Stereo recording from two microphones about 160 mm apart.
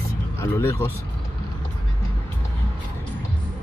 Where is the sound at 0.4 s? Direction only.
15° left (ahead or behind).